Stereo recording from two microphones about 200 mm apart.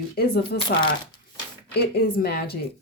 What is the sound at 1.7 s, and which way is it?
Speech, 55° left (ahead or behind).